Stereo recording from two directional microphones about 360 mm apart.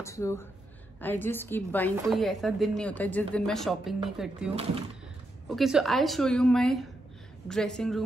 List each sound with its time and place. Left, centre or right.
0.0 s speech: centre
5.5 s speech: centre